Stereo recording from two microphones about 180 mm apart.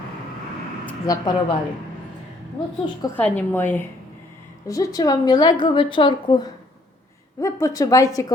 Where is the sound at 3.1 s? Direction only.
10° left (ahead or behind).